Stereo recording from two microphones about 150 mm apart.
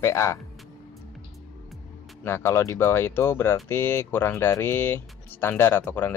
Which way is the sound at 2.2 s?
15° left (ahead or behind).